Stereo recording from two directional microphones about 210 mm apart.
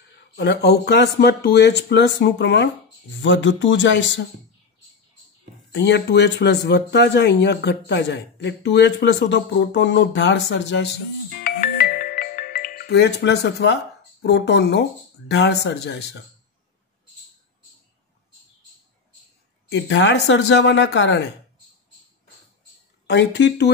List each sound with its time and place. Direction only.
0.4 s speech: 50° left (ahead or behind)
5.7 s speech: 55° left (ahead or behind)
11.4 s music: 45° left (ahead or behind)
14.2 s speech: 55° left (ahead or behind)
19.7 s speech: 55° left (ahead or behind)
23.0 s speech: 55° left (ahead or behind)